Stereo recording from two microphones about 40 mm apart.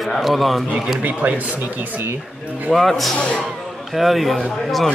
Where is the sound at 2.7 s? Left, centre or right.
Centre.